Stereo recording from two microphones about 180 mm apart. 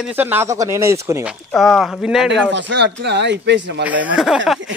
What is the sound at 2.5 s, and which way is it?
Speech, 80° right.